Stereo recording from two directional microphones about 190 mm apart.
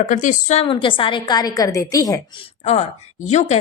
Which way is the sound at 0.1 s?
40° left (ahead or behind).